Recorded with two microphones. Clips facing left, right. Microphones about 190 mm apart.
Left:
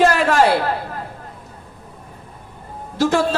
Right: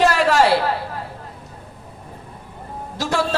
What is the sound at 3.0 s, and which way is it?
Speech, 50° left (ahead or behind).